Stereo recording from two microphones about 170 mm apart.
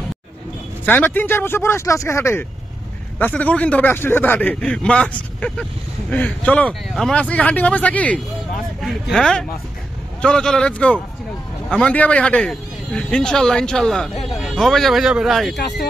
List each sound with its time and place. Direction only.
0.8 s a man's voice: 10° left (ahead or behind)
15.5 s speech: 80° left